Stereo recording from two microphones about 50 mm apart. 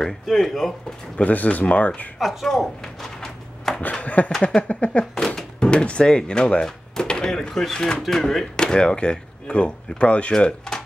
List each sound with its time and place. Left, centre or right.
0.0 s speech: centre
1.1 s speech: left
2.1 s a sound: centre
4.0 s a sound: left
4.6 s speech: left
5.1 s speech: centre
10.3 s speech: centre